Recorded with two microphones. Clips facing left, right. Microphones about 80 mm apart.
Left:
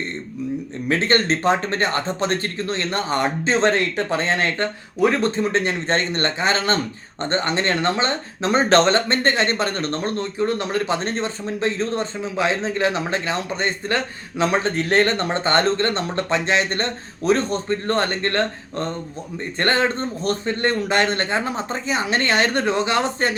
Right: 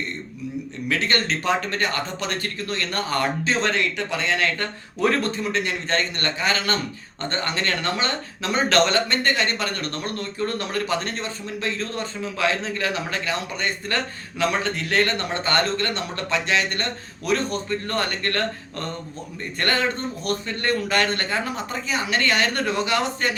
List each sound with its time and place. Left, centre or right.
0.9 s speech: left
4.9 s speech: centre
5.2 s speech: left